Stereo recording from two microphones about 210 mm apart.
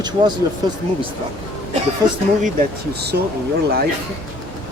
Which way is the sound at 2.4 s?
45° right (ahead or behind).